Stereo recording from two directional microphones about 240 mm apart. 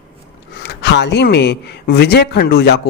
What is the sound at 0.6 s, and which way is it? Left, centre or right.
Speech, left.